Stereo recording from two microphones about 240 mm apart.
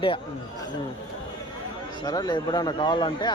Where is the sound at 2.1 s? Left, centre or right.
Centre.